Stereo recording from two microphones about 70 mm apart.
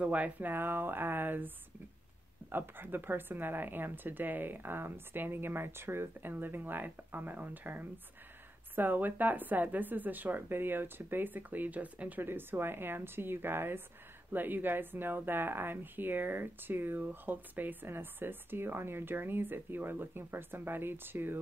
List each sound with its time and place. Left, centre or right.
0.0 s speech: right
2.5 s speech: right
12.3 s a woman's voice: right